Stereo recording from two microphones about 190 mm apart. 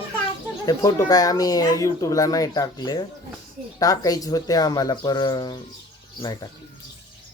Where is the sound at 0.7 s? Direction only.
20° left (ahead or behind).